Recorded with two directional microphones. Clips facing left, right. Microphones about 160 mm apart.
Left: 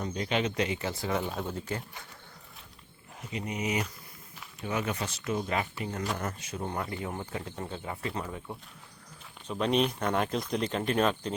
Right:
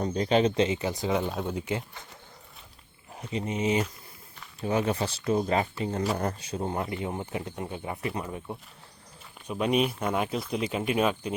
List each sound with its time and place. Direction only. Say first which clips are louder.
0.0 s speech: right 7 dB; 35° right (ahead or behind); by 1.8 s 15° right (ahead or behind)
3.2 s speech: right 5 dB; 30° right (ahead or behind); by 11.3 s 10° right (ahead or behind)